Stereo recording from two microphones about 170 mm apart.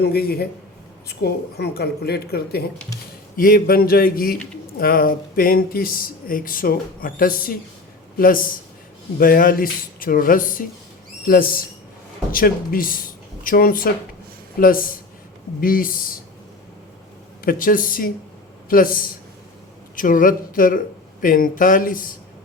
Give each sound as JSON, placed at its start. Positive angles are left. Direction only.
{"t": 0.0, "sound": "speech", "side_deg": 70}
{"t": 17.4, "sound": "speech", "side_deg": 55}